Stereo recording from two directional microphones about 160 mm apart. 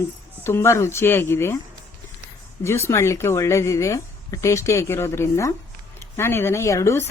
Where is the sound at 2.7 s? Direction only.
15° left (ahead or behind).